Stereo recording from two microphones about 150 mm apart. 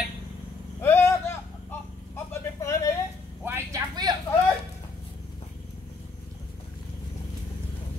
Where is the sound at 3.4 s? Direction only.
15° right (ahead or behind).